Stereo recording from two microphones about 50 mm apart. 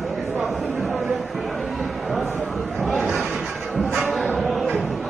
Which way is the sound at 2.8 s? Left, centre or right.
Right.